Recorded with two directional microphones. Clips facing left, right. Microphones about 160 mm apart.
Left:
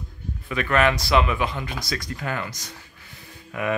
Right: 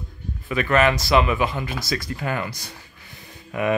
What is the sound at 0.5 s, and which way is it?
Speech, 5° right (ahead or behind).